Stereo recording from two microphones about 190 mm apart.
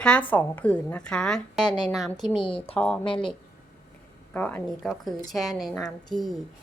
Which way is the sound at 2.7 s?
5° left (ahead or behind).